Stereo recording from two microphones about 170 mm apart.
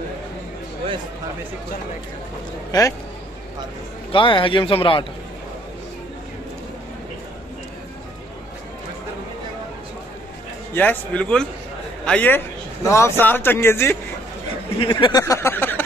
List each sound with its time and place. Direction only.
4.1 s a man's voice: 30° left (ahead or behind)
10.7 s a man's voice: 10° left (ahead or behind)
14.8 s a sound: 30° left (ahead or behind); by 15.8 s 10° left (ahead or behind)